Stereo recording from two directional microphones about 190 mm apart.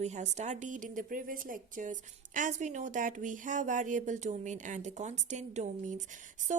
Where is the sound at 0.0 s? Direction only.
35° right (ahead or behind).